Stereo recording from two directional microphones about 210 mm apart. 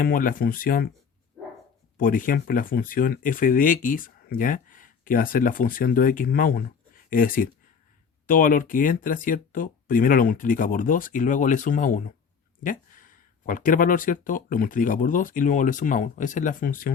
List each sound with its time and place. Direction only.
0.0 s speech: 40° left (ahead or behind)
2.0 s speech: 40° left (ahead or behind)